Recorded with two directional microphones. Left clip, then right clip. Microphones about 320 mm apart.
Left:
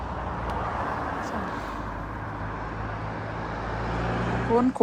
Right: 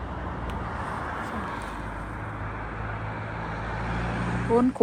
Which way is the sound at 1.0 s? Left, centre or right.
Left.